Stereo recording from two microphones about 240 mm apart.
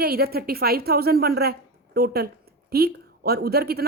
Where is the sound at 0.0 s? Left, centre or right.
Right.